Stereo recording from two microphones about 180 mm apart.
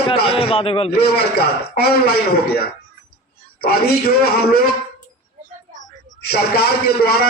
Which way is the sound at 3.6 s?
60° left (ahead or behind).